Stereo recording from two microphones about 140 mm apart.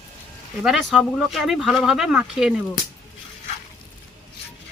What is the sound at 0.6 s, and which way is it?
Speech, centre (ahead or behind).